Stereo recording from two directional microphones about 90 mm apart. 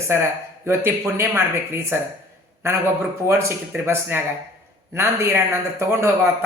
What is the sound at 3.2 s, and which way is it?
A woman's voice, 30° right (ahead or behind).